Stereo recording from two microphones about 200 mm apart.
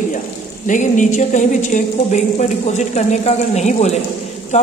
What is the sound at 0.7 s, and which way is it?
A woman's voice, 40° left (ahead or behind).